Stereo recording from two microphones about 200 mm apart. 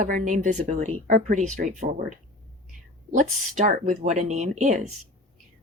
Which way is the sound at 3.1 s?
40° right (ahead or behind).